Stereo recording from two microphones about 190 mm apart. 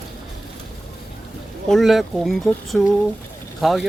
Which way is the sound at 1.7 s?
Centre (ahead or behind).